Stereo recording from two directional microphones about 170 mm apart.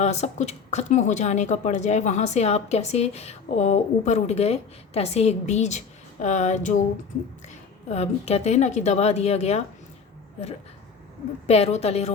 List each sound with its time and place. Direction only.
0.0 s a woman's voice: 40° left (ahead or behind)
6.2 s a sound: 45° left (ahead or behind)
7.4 s a woman's voice: 40° left (ahead or behind)
11.4 s a woman's voice: 40° left (ahead or behind)